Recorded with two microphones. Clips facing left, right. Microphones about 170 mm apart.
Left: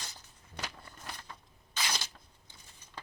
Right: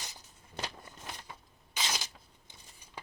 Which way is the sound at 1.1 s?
15° right (ahead or behind).